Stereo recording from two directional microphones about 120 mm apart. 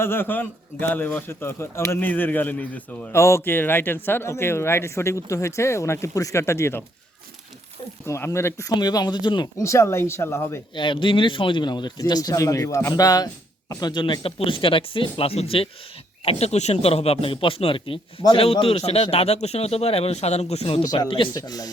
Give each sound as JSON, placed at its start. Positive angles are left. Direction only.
{"t": 0.0, "sound": "a man's voice", "side_deg": 20}
{"t": 3.2, "sound": "speech", "side_deg": 25}
{"t": 8.0, "sound": "a man's voice", "side_deg": 25}
{"t": 9.6, "sound": "speech", "side_deg": 25}
{"t": 10.8, "sound": "a man's voice", "side_deg": 45}
{"t": 20.8, "sound": "a man's voice", "side_deg": 30}